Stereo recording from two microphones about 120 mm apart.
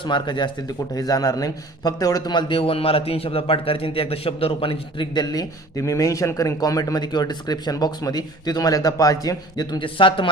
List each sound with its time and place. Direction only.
0.0 s a man's voice: 40° left (ahead or behind)